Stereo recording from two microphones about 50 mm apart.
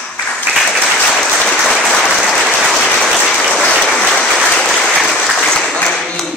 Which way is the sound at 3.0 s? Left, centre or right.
Centre.